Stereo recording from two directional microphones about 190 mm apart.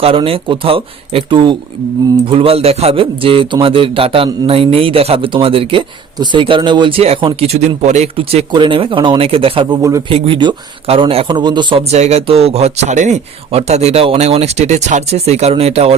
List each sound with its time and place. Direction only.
0.0 s a man's voice: 30° right (ahead or behind)